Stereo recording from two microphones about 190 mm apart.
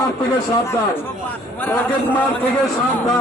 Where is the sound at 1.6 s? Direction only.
10° left (ahead or behind).